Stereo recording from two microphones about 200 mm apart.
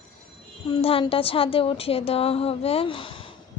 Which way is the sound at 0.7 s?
30° left (ahead or behind).